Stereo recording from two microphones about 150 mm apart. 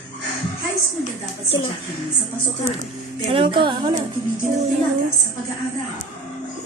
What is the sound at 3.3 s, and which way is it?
Speech, 35° right (ahead or behind).